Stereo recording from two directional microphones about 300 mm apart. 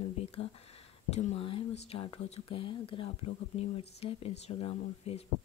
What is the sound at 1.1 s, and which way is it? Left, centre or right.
Speech, centre.